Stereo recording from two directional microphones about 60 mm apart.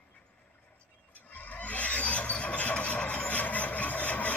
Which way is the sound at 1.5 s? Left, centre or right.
Left.